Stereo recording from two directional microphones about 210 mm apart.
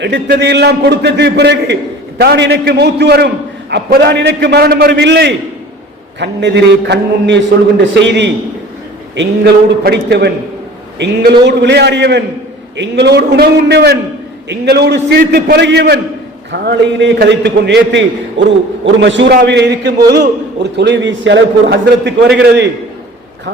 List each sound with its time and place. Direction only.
0.0 s a man's voice: 55° right (ahead or behind)